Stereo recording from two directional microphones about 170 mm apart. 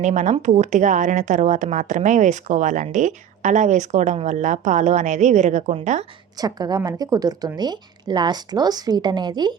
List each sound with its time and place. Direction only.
0.0 s speech: 45° right (ahead or behind)
6.3 s speech: 25° right (ahead or behind)